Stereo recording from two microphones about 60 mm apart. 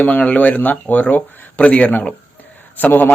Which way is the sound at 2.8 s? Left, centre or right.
Left.